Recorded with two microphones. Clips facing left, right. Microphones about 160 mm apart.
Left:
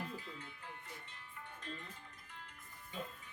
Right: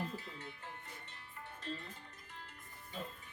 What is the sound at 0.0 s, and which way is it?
Music, 35° right (ahead or behind).